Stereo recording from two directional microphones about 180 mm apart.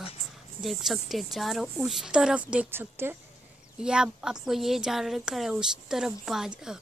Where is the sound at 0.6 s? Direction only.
Centre (ahead or behind).